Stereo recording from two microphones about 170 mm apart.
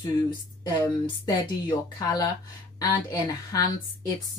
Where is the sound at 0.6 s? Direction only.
20° left (ahead or behind).